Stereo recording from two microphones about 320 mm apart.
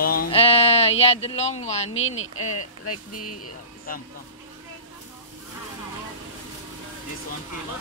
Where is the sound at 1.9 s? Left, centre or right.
Left.